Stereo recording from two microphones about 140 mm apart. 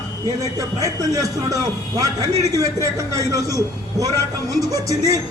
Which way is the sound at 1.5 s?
25° right (ahead or behind).